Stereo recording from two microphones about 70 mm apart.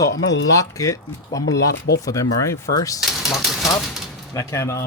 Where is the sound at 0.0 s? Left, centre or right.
Left.